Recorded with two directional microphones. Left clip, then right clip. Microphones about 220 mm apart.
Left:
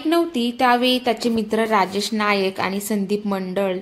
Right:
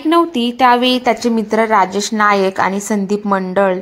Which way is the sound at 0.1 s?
15° right (ahead or behind).